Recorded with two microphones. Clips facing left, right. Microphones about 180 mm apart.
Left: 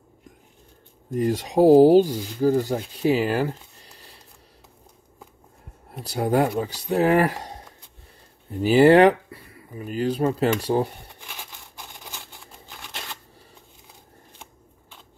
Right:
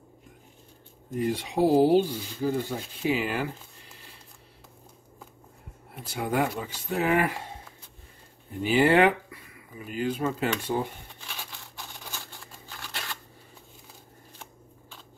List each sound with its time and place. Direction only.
1.1 s speech: 45° left (ahead or behind)
5.9 s speech: 40° left (ahead or behind)
8.6 s speech: 40° left (ahead or behind)
11.1 s a sound: 15° left (ahead or behind)